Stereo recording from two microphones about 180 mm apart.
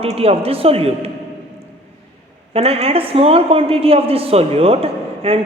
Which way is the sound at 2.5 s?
35° right (ahead or behind).